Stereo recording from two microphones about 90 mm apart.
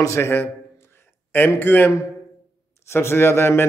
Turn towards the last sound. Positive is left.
turn(degrees=30)  # may be behind; listen again after turning